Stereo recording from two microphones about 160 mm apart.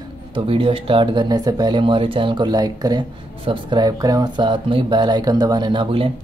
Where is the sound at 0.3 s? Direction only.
35° right (ahead or behind).